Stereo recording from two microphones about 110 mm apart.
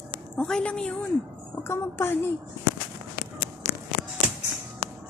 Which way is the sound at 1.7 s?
25° left (ahead or behind).